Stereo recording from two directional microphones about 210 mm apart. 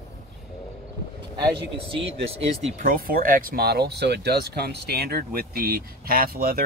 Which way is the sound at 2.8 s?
40° right (ahead or behind).